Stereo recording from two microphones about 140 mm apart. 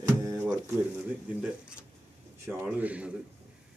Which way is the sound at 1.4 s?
10° right (ahead or behind).